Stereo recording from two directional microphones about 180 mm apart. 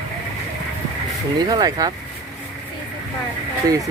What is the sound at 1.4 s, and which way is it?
Speech, 25° right (ahead or behind).